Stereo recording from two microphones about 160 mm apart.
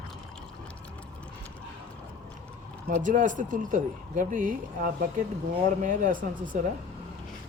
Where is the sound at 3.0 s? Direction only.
55° right (ahead or behind).